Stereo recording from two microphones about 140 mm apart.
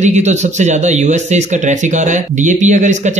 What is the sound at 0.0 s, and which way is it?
Speech, 55° right (ahead or behind).